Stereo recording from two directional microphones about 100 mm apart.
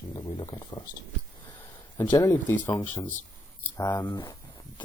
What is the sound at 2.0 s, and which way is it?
Speech, 30° left (ahead or behind).